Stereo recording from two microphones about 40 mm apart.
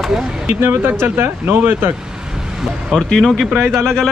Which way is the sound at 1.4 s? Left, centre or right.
Right.